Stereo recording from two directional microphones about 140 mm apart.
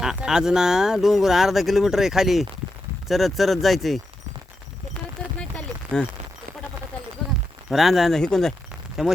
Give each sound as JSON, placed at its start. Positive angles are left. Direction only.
{"t": 0.0, "sound": "speech", "side_deg": -5}
{"t": 5.4, "sound": "a sound", "side_deg": 10}
{"t": 7.7, "sound": "speech", "side_deg": 0}